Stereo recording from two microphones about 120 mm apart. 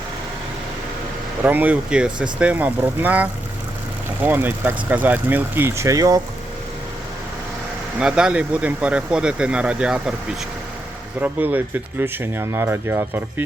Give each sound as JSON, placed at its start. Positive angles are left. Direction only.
{"t": 1.4, "sound": "speech", "side_deg": -15}
{"t": 7.9, "sound": "speech", "side_deg": -5}
{"t": 11.2, "sound": "speech", "side_deg": -15}